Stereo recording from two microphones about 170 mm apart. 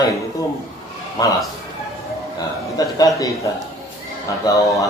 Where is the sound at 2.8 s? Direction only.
20° left (ahead or behind).